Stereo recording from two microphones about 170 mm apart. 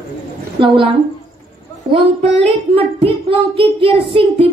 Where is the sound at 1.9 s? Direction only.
35° right (ahead or behind).